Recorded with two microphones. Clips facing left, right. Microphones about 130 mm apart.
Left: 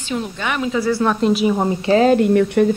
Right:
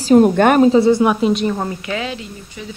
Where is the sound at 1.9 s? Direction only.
40° left (ahead or behind).